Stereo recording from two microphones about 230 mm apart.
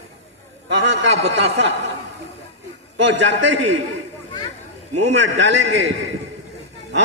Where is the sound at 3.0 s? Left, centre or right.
Right.